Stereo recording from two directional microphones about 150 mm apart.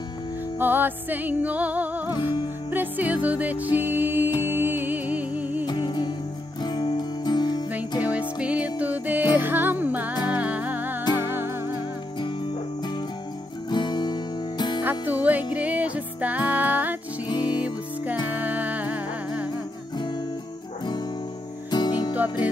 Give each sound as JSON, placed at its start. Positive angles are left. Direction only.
{"t": 0.6, "sound": "music", "side_deg": -15}
{"t": 5.7, "sound": "music", "side_deg": 30}
{"t": 8.0, "sound": "music", "side_deg": -10}
{"t": 13.7, "sound": "music", "side_deg": 30}
{"t": 14.8, "sound": "music", "side_deg": -15}
{"t": 17.3, "sound": "music", "side_deg": 30}
{"t": 17.6, "sound": "music", "side_deg": -10}
{"t": 21.6, "sound": "music", "side_deg": 30}
{"t": 22.1, "sound": "music", "side_deg": -10}